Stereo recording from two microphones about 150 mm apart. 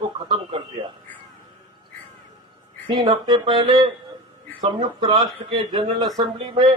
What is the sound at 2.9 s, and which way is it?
A man's voice, 30° right (ahead or behind).